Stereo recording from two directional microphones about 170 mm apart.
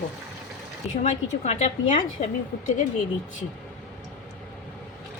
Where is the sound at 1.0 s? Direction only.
45° left (ahead or behind).